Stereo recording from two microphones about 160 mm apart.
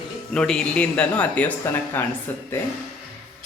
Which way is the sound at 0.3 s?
5° left (ahead or behind).